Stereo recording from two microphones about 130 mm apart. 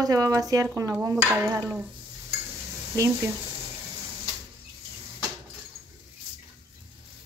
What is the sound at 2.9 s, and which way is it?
Speech, 20° right (ahead or behind).